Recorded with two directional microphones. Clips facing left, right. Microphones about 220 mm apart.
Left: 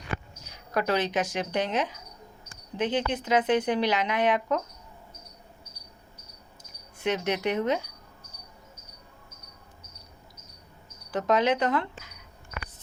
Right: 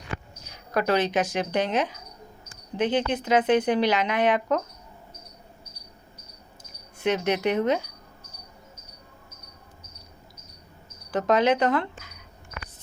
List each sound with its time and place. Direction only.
0.7 s speech: 65° right (ahead or behind)
7.0 s speech: 70° right (ahead or behind)
11.1 s speech: 60° right (ahead or behind)